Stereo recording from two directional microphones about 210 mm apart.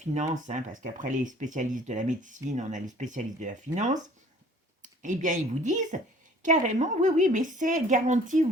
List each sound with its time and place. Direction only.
0.0 s speech: 35° right (ahead or behind)